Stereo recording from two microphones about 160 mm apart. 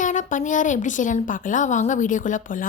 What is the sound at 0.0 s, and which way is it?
A woman's voice, 50° left (ahead or behind).